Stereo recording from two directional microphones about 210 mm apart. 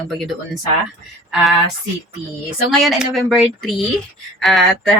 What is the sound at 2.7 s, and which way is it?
Speech, centre (ahead or behind).